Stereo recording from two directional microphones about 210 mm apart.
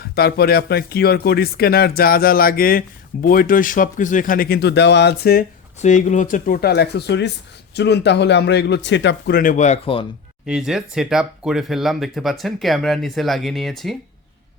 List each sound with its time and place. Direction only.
0.0 s speech: 50° left (ahead or behind); by 10.1 s 25° left (ahead or behind)
10.4 s speech: 5° right (ahead or behind)